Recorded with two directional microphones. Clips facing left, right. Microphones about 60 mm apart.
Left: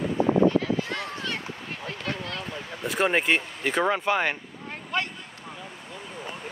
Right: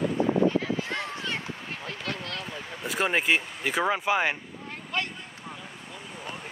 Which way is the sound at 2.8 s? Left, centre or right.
Centre.